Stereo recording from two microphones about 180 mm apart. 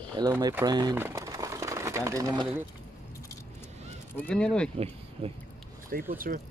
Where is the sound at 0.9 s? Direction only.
15° right (ahead or behind).